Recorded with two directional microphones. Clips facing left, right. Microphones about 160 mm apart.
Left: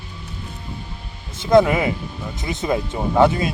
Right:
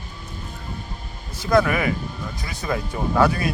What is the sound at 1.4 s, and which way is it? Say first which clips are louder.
Speech: left 4 dB; 25° left (ahead or behind).